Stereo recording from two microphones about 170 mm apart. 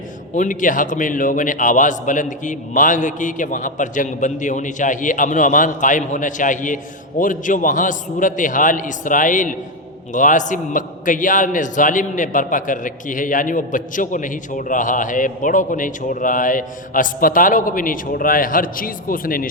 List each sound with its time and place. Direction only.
0.3 s a man's voice: 50° left (ahead or behind)